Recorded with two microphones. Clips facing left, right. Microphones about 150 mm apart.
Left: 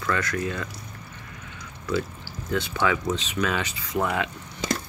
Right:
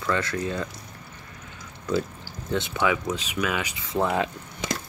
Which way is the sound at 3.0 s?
10° right (ahead or behind).